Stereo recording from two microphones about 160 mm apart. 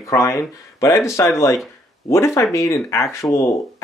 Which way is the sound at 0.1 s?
20° left (ahead or behind).